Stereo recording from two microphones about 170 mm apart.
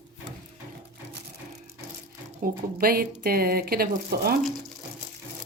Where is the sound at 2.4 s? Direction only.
55° right (ahead or behind).